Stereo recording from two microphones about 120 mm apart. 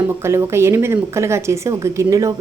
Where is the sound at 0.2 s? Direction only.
20° right (ahead or behind).